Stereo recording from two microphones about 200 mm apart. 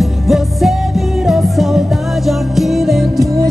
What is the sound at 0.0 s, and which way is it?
Music, centre (ahead or behind).